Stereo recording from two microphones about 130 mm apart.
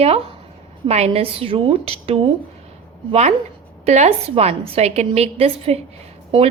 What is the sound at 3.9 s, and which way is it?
A woman's voice, 55° right (ahead or behind).